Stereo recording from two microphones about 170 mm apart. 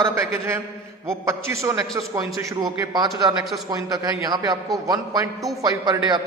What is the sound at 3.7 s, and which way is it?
A man's voice, 20° right (ahead or behind).